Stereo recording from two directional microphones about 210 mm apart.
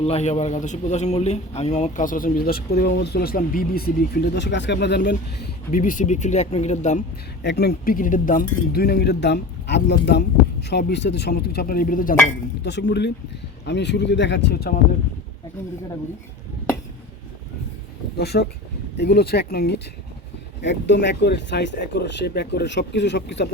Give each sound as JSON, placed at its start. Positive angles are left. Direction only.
{"t": 0.0, "sound": "a man's voice", "side_deg": 30}
{"t": 7.4, "sound": "a man's voice", "side_deg": 50}
{"t": 12.6, "sound": "speech", "side_deg": 55}
{"t": 18.2, "sound": "speech", "side_deg": 50}